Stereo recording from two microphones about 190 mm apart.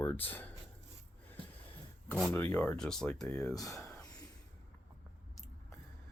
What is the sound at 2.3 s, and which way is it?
Speech, 10° left (ahead or behind).